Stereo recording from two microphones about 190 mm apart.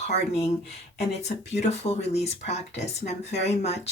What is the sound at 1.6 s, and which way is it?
Speech, 35° left (ahead or behind).